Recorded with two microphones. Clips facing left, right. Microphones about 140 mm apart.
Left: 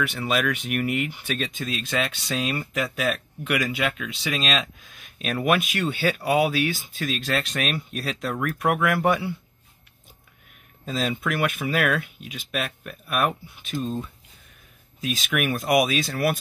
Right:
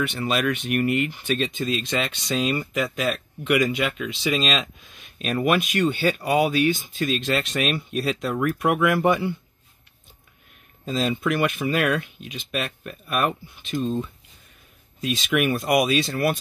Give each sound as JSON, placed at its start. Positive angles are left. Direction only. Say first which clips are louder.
{"t": 0.0, "sound": "speech", "louder": "right 1 dB", "side_deg": 0}
{"t": 10.9, "sound": "speech", "louder": "right 3 dB", "side_deg": 0}